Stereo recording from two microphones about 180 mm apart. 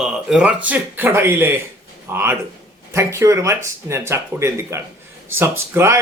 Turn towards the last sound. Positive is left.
turn(degrees=-15)  # may be behind; listen again after turning